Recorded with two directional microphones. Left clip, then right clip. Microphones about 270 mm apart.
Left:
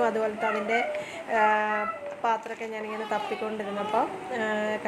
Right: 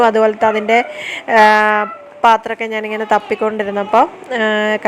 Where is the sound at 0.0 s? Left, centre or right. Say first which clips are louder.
Right 15 dB; right.